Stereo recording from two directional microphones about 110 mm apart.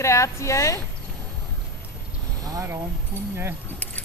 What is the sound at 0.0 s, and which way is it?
Speech, 25° left (ahead or behind).